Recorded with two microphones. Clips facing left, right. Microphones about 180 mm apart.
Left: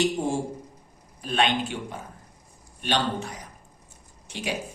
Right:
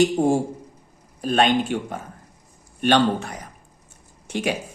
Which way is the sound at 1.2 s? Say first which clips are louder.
Right 6 dB; 45° right (ahead or behind).